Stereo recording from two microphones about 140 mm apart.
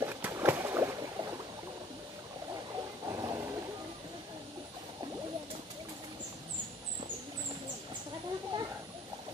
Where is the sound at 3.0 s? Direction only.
25° right (ahead or behind).